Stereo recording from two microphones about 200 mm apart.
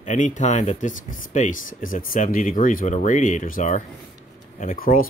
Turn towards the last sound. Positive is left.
turn(degrees=45)  # may be behind; listen again after turning